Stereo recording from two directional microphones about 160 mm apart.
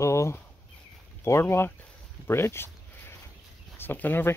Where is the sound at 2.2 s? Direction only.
15° left (ahead or behind).